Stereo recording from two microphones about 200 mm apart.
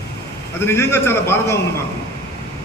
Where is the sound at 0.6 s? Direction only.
10° left (ahead or behind).